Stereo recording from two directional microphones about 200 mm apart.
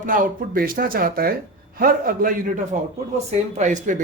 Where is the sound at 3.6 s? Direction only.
40° right (ahead or behind).